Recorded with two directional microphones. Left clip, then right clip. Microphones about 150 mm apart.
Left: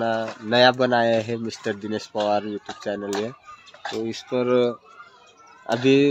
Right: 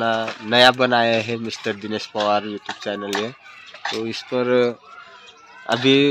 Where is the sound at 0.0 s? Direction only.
5° right (ahead or behind).